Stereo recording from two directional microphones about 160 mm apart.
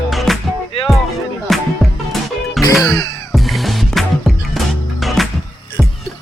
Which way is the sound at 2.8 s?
25° left (ahead or behind).